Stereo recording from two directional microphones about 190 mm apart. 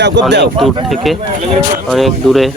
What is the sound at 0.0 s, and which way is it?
Speech, 65° right (ahead or behind).